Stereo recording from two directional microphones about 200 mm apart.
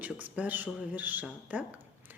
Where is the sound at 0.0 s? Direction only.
10° right (ahead or behind).